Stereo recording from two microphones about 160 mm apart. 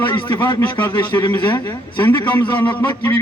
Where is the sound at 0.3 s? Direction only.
25° left (ahead or behind).